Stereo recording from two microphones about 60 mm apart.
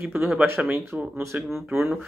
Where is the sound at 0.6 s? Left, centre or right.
Centre.